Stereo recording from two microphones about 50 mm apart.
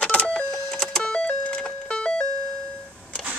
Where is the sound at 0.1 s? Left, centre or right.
Left.